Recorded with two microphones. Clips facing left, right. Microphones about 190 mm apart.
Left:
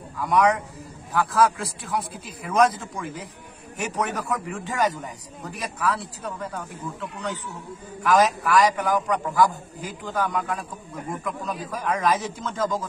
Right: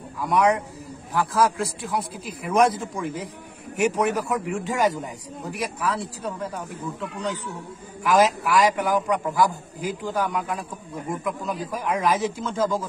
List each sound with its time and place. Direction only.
0.2 s a man's voice: 15° right (ahead or behind)
3.7 s a man's voice: 15° right (ahead or behind)